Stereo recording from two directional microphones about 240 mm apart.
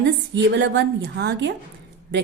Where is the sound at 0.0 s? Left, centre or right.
Right.